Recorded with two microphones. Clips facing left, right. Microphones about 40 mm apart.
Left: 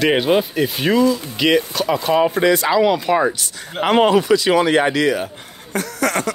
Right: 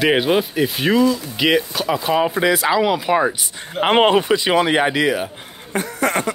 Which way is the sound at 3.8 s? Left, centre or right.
Right.